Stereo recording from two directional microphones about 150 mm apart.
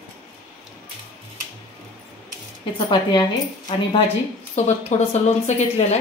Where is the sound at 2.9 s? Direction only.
30° left (ahead or behind).